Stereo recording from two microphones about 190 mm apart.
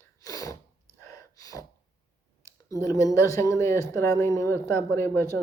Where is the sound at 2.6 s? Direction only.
15° left (ahead or behind).